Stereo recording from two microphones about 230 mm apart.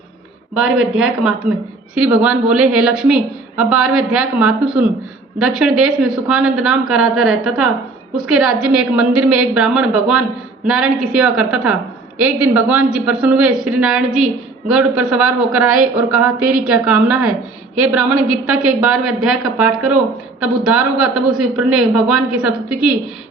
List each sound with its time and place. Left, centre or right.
0.8 s a man's voice: centre